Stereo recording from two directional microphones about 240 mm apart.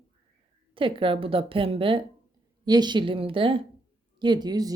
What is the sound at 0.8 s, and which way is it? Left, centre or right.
A woman's voice, right.